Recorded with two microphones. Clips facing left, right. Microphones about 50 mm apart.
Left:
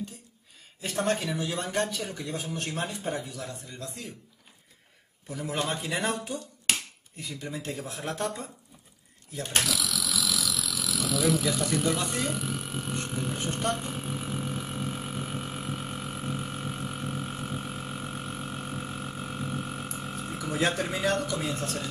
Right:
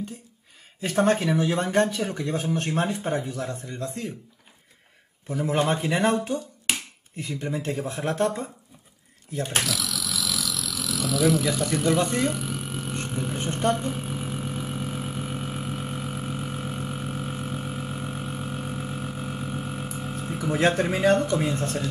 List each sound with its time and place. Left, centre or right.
0.8 s speech: right
5.3 s speech: right
9.4 s engine: centre
11.8 s speech: centre
12.4 s a sound: centre
12.9 s vehicle: centre
13.4 s a sound: centre
13.7 s vehicle: centre
20.5 s speech: right